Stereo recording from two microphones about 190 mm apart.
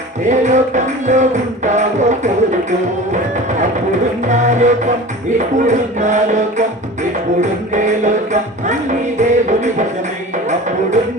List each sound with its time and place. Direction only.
0.3 s music: 40° right (ahead or behind)
4.3 s music: 40° right (ahead or behind)
7.7 s music: 40° right (ahead or behind)